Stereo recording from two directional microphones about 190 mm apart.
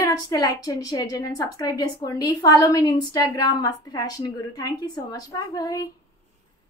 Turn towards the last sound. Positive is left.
turn(degrees=20)  # may be behind; listen again after turning